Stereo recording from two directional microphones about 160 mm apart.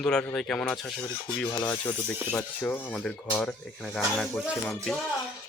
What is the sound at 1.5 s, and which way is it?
Speech, 15° left (ahead or behind).